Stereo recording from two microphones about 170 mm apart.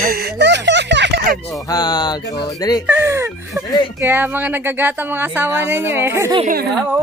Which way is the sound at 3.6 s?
20° left (ahead or behind).